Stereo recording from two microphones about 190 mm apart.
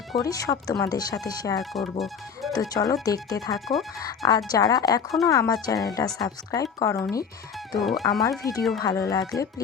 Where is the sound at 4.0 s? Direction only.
20° left (ahead or behind).